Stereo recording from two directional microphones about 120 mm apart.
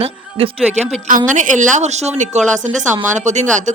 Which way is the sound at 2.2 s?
90° right.